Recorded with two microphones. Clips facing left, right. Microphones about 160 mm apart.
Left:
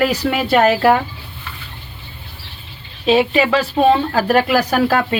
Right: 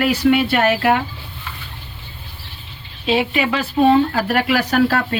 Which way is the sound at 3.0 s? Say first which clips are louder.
Left 4 dB; 35° left (ahead or behind).